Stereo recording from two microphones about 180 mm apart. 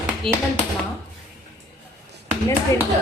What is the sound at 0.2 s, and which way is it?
Speech, 30° right (ahead or behind).